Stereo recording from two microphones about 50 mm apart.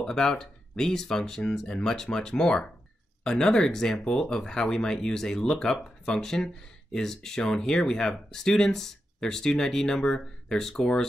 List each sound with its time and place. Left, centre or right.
0.0 s speech: centre